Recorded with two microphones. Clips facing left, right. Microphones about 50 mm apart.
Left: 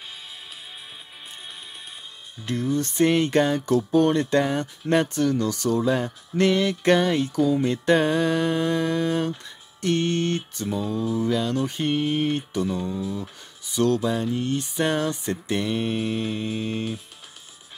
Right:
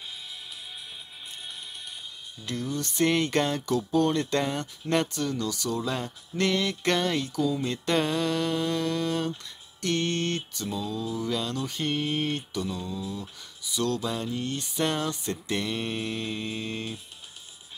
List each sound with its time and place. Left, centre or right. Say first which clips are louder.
2.4 s mantra: left 7 dB; left
3.1 s music: left 4 dB; centre
3.6 s speech: left 5 dB; left
4.2 s mantra: left 5 dB; centre
5.1 s speech: left 7 dB; left
5.9 s mantra: left 8 dB; left
7.3 s speech: left 8 dB; left
7.6 s mantra: left 6 dB; centre; by 11.2 s left
11.2 s mantra: left 6 dB; left
14.1 s mantra: left 6 dB; left